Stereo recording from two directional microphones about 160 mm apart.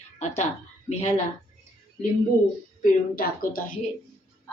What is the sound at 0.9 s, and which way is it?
Speech, 50° left (ahead or behind).